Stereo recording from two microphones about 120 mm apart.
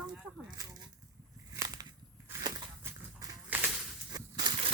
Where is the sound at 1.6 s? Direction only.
30° right (ahead or behind).